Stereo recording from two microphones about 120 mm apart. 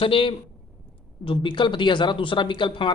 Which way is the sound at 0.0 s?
45° left (ahead or behind).